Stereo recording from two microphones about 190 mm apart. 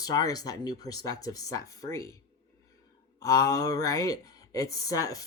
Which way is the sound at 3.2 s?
15° left (ahead or behind).